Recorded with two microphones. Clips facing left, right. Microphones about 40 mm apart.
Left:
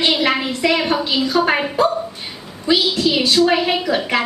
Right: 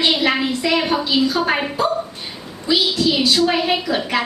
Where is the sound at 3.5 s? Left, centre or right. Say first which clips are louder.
Left 2 dB; centre.